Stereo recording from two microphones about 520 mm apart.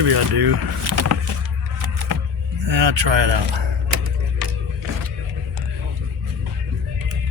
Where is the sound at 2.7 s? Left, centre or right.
Right.